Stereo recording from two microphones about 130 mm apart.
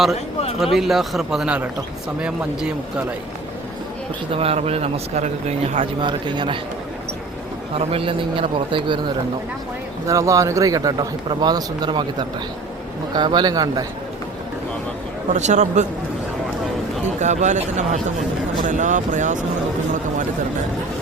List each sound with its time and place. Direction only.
0.6 s speech: centre (ahead or behind)
4.3 s a man's voice: 50° right (ahead or behind)
6.0 s speech: 35° right (ahead or behind)
7.8 s a man's voice: 45° right (ahead or behind)
10.1 s a man's voice: 25° right (ahead or behind)
13.1 s speech: 35° right (ahead or behind)
15.3 s speech: 65° right (ahead or behind)
17.2 s speech: 65° right (ahead or behind)